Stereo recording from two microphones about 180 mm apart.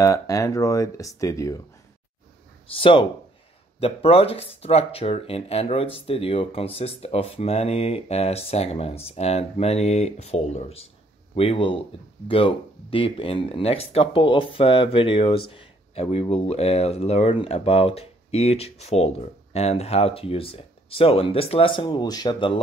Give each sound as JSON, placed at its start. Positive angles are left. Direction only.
{"t": 0.0, "sound": "speech", "side_deg": 20}
{"t": 2.7, "sound": "speech", "side_deg": 30}